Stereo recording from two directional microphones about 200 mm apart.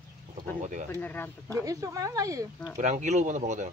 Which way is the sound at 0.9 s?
10° left (ahead or behind).